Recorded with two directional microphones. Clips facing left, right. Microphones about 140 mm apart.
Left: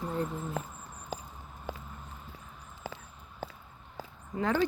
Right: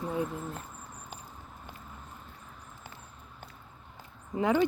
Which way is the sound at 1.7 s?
90° left.